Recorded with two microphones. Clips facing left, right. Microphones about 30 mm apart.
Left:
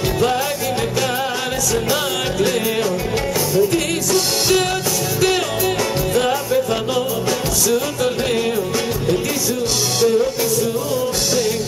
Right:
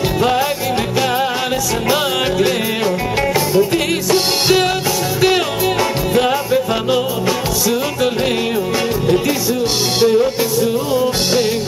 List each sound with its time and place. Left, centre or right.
1.9 s music: right
6.1 s music: right
9.9 s music: right